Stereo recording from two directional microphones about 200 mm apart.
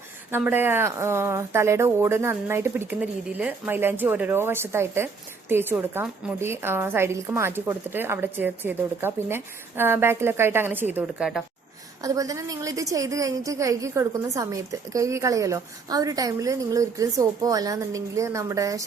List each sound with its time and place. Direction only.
0.3 s a woman's voice: 10° right (ahead or behind)
12.0 s a woman's voice: 15° right (ahead or behind)